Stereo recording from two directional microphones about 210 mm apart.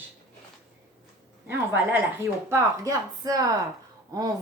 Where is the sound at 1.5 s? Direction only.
10° right (ahead or behind).